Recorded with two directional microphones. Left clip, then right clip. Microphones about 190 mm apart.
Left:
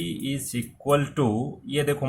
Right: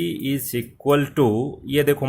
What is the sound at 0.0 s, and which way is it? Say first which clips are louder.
Speech: right 6 dB; 40° right (ahead or behind).